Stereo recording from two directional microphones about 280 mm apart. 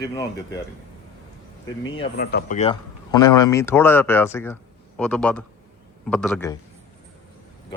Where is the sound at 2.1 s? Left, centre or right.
Left.